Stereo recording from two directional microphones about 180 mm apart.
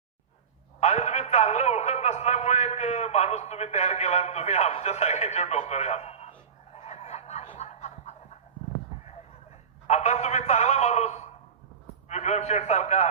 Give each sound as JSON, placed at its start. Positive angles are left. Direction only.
{"t": 0.8, "sound": "a man's voice", "side_deg": 40}
{"t": 6.7, "sound": "a sound", "side_deg": 35}
{"t": 9.8, "sound": "a man's voice", "side_deg": 40}